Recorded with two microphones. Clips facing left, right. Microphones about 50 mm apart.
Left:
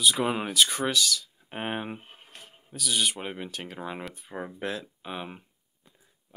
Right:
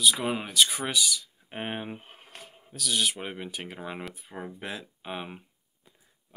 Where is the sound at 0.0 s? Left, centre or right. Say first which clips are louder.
Left 1 dB; centre.